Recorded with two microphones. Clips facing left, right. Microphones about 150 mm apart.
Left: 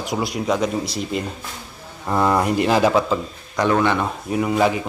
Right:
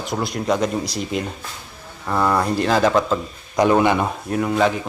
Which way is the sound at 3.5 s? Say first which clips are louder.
Right 3 dB; 15° right (ahead or behind).